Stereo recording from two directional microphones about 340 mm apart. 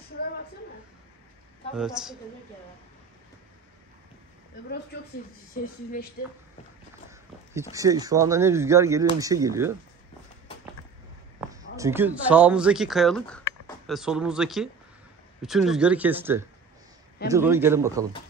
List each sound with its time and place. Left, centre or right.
1.8 s speech: centre
5.5 s speech: left
7.7 s speech: centre
11.3 s speech: centre